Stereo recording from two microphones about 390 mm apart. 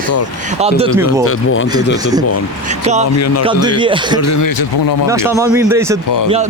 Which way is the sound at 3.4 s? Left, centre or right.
Centre.